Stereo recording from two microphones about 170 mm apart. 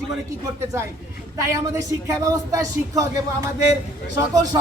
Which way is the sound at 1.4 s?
15° right (ahead or behind).